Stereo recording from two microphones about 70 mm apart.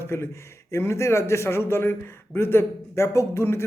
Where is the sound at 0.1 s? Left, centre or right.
Left.